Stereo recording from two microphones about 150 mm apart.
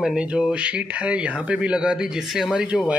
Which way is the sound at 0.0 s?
5° right (ahead or behind).